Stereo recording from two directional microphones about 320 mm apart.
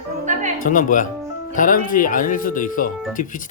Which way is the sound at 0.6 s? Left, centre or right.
Left.